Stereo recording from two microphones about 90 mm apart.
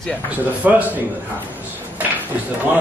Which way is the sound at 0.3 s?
20° right (ahead or behind).